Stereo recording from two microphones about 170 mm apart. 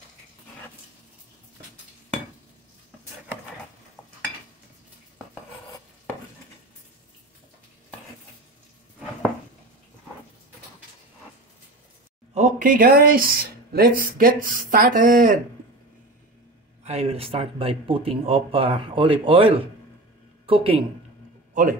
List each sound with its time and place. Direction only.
12.4 s speech: 50° right (ahead or behind)
16.8 s a man's voice: 40° right (ahead or behind)